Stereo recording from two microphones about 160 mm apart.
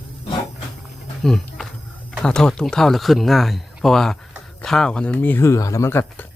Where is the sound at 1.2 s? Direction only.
Centre (ahead or behind).